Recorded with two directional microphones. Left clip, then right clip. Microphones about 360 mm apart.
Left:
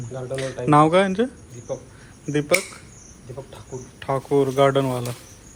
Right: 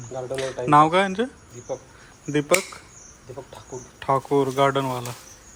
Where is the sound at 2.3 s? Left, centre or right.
Centre.